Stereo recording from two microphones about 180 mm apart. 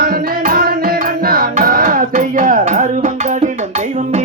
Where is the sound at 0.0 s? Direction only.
55° right (ahead or behind).